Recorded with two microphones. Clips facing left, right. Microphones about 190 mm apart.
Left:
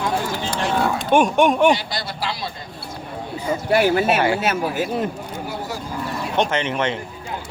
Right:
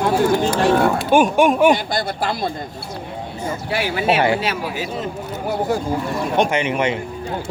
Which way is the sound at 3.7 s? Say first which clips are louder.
Left 3 dB; 45° left (ahead or behind).